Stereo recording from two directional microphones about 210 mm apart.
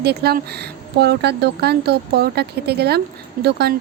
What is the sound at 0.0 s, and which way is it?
Speech, 50° right (ahead or behind).